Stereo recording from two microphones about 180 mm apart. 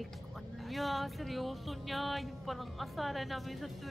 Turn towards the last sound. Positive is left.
turn(degrees=0)  # may be behind; listen again after turning